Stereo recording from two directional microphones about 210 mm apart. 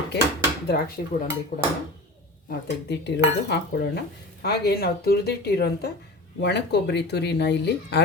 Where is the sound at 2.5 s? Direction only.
55° left (ahead or behind).